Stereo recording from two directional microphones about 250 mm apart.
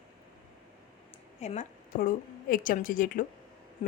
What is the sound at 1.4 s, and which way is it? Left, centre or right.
A woman's voice, left.